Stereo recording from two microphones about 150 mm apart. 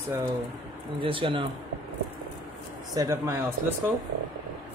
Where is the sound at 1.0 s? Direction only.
35° right (ahead or behind).